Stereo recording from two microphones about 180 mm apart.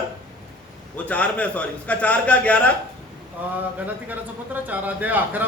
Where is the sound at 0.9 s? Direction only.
10° left (ahead or behind).